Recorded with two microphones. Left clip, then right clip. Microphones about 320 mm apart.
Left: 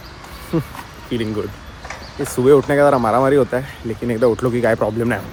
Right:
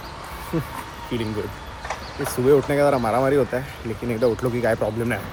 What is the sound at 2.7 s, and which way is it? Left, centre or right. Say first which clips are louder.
Speech: left 5 dB; left.